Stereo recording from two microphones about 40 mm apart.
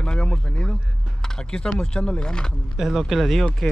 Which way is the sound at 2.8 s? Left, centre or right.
Centre.